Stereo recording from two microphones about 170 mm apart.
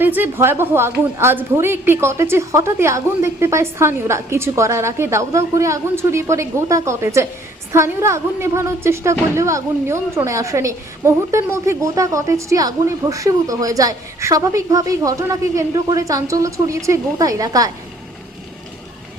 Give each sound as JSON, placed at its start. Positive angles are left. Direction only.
{"t": 0.0, "sound": "a woman's voice", "side_deg": -10}